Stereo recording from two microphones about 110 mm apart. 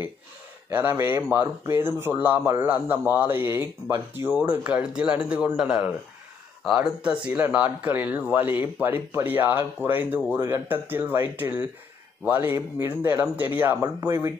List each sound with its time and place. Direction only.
0.7 s speech: 20° right (ahead or behind)